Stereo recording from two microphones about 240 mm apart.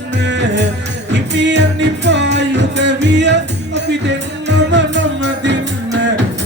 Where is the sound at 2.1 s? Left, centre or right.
Right.